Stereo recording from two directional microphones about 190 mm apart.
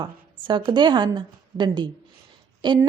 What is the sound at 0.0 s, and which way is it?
A woman's voice, 25° right (ahead or behind).